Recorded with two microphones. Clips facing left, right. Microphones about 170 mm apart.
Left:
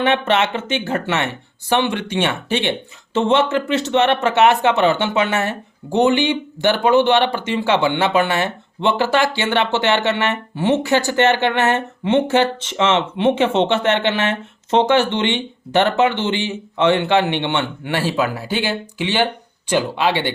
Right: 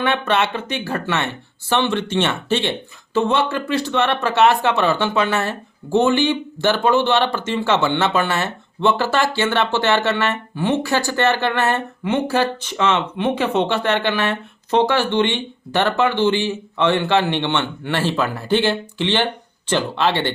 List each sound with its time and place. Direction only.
0.0 s speech: 20° left (ahead or behind)